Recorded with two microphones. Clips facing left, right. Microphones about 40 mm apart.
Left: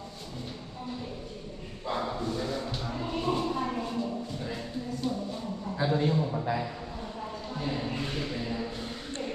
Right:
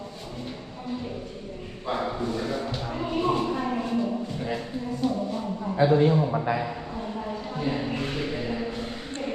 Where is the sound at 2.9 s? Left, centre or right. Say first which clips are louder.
Right 5 dB; right.